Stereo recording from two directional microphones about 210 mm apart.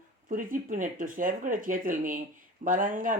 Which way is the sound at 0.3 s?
40° right (ahead or behind).